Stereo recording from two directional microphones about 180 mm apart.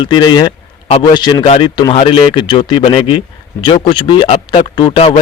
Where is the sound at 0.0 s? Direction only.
25° left (ahead or behind).